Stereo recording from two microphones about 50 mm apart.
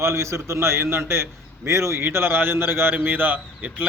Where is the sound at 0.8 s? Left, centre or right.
Right.